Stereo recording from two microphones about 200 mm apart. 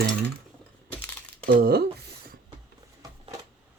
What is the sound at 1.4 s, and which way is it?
Speech, 50° right (ahead or behind).